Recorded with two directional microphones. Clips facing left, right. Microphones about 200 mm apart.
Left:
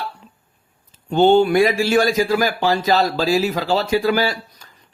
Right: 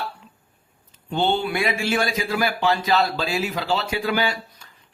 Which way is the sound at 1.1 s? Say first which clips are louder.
Left 9 dB; 45° left (ahead or behind).